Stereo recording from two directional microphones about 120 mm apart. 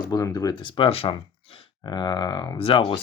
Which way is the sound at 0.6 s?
45° left (ahead or behind).